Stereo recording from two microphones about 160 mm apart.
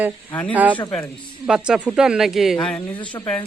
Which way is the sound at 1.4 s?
5° right (ahead or behind).